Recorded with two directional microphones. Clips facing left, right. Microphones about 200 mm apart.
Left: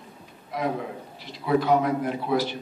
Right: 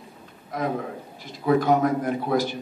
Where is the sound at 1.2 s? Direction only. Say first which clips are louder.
Right 2 dB; 45° right (ahead or behind).